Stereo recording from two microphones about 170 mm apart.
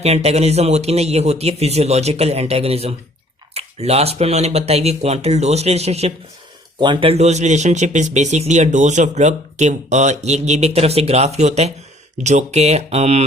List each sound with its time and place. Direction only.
0.0 s speech: 40° right (ahead or behind)
6.7 s speech: 25° right (ahead or behind)